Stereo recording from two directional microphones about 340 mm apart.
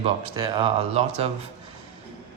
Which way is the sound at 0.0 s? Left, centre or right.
Centre.